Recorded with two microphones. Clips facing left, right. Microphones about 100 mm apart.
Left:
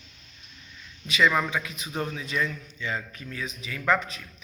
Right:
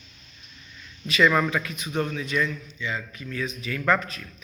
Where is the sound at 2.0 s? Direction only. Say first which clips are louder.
Right 3 dB; 25° left (ahead or behind).